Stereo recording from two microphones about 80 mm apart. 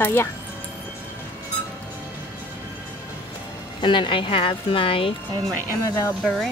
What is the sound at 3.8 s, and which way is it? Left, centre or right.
Speech, left.